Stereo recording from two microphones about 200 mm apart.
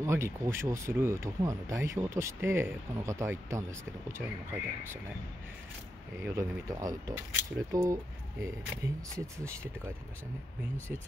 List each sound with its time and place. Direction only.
0.0 s speech: 15° right (ahead or behind)
6.1 s speech: 15° right (ahead or behind)